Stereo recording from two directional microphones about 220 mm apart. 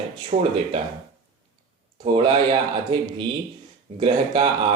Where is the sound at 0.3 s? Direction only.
30° right (ahead or behind).